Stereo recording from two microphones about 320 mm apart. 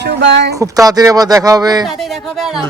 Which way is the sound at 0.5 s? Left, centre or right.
Centre.